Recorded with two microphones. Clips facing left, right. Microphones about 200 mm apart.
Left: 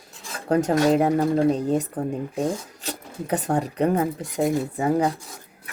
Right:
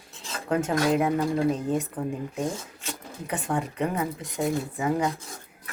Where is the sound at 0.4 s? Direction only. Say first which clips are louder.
Left 5 dB; 40° left (ahead or behind).